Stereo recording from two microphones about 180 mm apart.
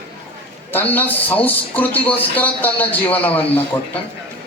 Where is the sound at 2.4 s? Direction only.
10° left (ahead or behind).